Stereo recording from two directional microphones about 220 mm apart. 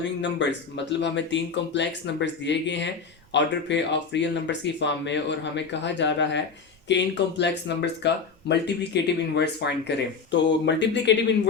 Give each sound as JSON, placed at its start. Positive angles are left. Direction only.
{"t": 0.0, "sound": "speech", "side_deg": 55}